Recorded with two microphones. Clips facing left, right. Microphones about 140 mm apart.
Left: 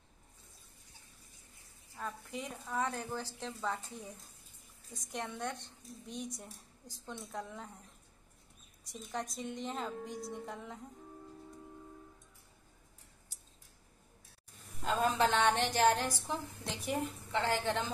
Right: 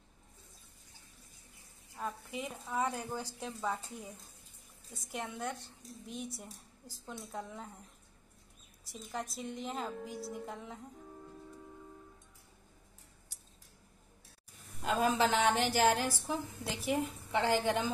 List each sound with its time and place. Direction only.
2.0 s a woman's voice: 5° right (ahead or behind)
8.9 s a woman's voice: centre (ahead or behind)
14.8 s a woman's voice: 5° right (ahead or behind)